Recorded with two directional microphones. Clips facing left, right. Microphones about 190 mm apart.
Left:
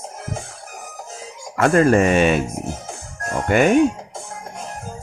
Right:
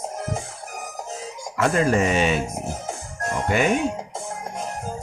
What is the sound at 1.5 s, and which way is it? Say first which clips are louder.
Speech: left 5 dB; 55° left (ahead or behind).